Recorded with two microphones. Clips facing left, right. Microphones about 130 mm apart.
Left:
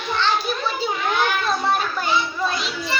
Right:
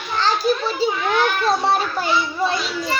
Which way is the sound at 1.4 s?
35° right (ahead or behind).